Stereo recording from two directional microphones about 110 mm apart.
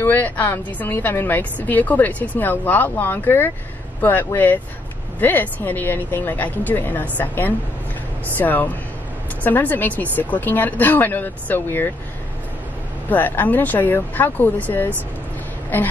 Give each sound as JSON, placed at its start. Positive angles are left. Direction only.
{"t": 0.0, "sound": "a woman's voice", "side_deg": 15}
{"t": 13.1, "sound": "a woman's voice", "side_deg": 15}